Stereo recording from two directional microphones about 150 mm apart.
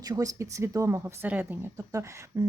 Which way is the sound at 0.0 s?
25° right (ahead or behind).